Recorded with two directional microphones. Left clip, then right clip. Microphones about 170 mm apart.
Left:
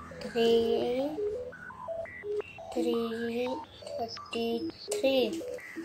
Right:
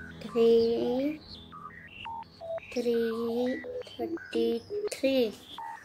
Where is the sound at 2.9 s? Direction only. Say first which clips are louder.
Right 7 dB; 35° right (ahead or behind).